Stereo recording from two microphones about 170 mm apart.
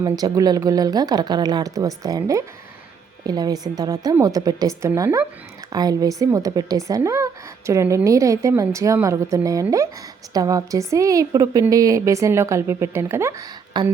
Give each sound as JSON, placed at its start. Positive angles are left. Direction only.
{"t": 0.0, "sound": "a woman's voice", "side_deg": -25}